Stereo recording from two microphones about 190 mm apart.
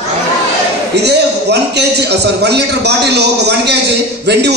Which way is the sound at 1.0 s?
60° right (ahead or behind).